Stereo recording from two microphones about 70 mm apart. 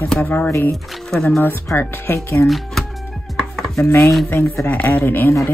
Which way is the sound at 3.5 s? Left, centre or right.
Centre.